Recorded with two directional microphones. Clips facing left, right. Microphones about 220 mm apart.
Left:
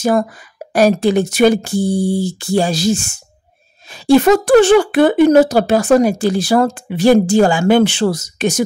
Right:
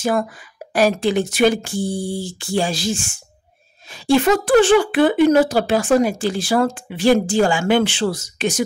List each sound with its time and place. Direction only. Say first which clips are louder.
0.7 s speech: left 5 dB; 40° left (ahead or behind)